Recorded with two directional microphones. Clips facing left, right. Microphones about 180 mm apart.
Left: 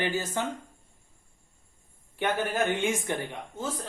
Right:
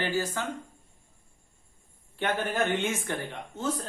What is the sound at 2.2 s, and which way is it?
Speech, 15° left (ahead or behind).